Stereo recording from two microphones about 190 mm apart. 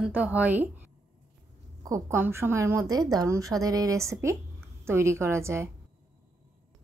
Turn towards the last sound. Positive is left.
turn(degrees=-15)  # may be behind; listen again after turning